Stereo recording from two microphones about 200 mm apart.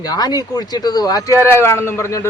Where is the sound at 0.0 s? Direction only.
20° left (ahead or behind).